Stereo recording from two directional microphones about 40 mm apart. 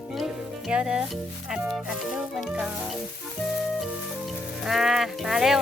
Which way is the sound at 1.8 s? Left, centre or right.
Centre.